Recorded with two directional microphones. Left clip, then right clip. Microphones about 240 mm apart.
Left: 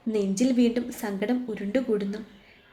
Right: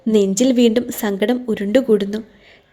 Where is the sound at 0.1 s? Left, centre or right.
Right.